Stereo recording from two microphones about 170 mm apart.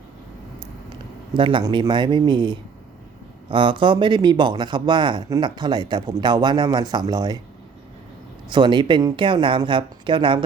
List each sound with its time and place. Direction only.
1.3 s speech: 30° right (ahead or behind)
8.4 s speech: 25° right (ahead or behind)